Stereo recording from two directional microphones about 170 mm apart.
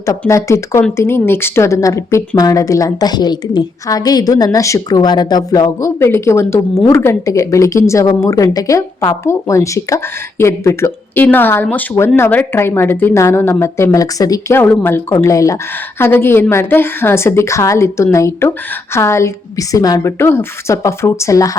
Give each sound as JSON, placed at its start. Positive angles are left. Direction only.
{"t": 0.0, "sound": "a woman's voice", "side_deg": 15}